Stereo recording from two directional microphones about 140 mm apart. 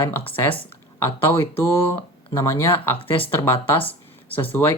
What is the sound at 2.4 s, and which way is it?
Speech, 20° left (ahead or behind).